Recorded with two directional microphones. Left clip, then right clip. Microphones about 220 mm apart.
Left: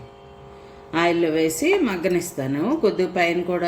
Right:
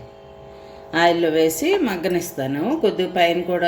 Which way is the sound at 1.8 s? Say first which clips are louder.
Even; 5° left (ahead or behind).